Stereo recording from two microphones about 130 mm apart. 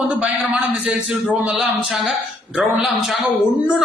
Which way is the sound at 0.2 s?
10° right (ahead or behind).